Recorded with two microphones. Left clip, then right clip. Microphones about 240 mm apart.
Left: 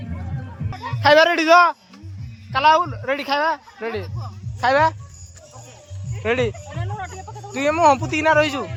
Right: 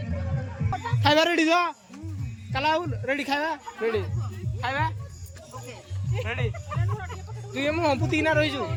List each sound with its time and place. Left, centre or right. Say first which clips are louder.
1.0 s speech: left 7 dB; centre
7.5 s speech: left 9 dB; centre